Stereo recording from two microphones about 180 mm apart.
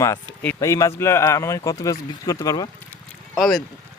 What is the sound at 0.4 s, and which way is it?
Speech, 15° left (ahead or behind).